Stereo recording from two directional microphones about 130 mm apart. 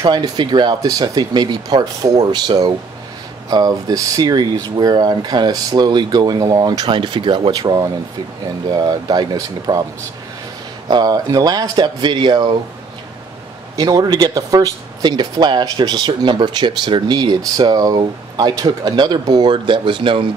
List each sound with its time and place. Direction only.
0.0 s speech: 35° right (ahead or behind)
10.9 s speech: 30° right (ahead or behind)
13.7 s speech: 30° right (ahead or behind)